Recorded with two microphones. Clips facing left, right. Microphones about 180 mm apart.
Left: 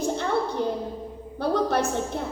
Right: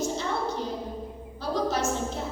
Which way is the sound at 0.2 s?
60° left (ahead or behind).